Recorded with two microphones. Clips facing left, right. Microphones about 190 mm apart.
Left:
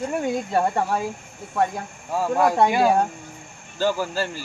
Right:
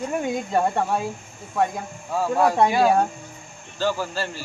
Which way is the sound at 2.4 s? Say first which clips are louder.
Even; 10° left (ahead or behind).